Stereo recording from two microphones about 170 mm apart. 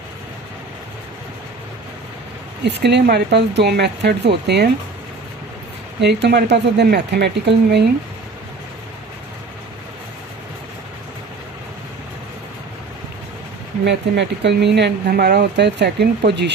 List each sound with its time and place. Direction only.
2.6 s speech: 90° right
6.0 s speech: 85° right
13.8 s speech: 85° right
15.0 s speech: 65° right (ahead or behind)